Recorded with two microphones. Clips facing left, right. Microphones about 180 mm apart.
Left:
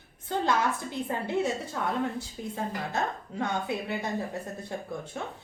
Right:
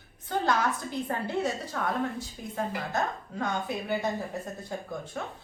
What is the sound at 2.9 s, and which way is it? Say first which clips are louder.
A woman's voice: even; 25° left (ahead or behind).